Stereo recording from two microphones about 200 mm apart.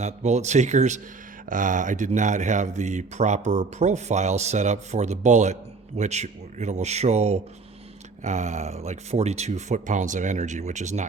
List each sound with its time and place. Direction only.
0.0 s speech: 35° right (ahead or behind)